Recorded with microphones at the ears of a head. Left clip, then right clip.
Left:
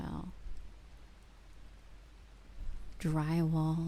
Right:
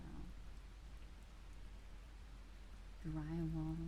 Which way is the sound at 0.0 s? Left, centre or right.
Left.